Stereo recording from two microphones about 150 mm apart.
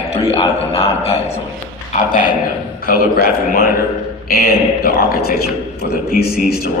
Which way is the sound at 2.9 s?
80° left.